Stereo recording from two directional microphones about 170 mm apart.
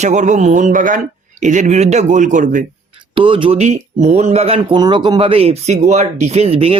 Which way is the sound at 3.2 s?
30° right (ahead or behind).